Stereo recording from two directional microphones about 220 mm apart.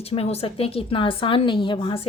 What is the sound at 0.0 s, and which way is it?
A woman's voice, 25° left (ahead or behind).